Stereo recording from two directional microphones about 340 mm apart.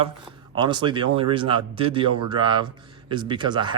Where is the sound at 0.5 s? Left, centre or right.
Centre.